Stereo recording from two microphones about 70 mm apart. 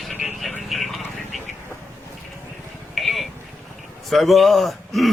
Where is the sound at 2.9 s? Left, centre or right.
Centre.